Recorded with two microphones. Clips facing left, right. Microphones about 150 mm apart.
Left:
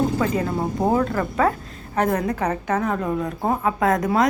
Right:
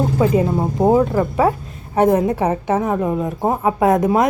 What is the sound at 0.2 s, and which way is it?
Speech, 15° right (ahead or behind).